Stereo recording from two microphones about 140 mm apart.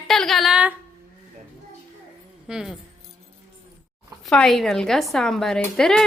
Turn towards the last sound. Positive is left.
turn(degrees=5)  # may be behind; listen again after turning